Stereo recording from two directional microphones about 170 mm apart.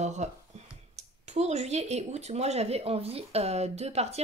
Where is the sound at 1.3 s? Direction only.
40° right (ahead or behind).